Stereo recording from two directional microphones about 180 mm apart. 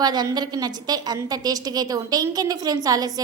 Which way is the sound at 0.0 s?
20° right (ahead or behind).